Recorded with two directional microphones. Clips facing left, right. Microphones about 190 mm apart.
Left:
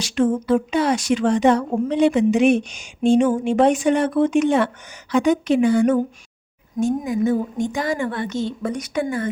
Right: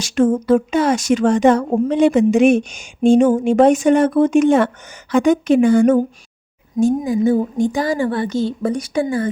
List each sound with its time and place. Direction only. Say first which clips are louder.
0.0 s speech: right 4 dB; 45° right (ahead or behind)
6.7 s a woman's voice: right 4 dB; 30° right (ahead or behind)